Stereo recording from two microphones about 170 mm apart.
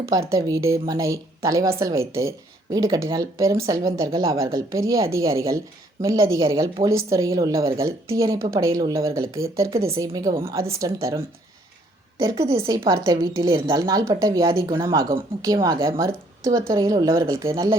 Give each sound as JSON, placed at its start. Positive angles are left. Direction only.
{"t": 0.3, "sound": "a woman's voice", "side_deg": -20}
{"t": 12.2, "sound": "a woman's voice", "side_deg": -20}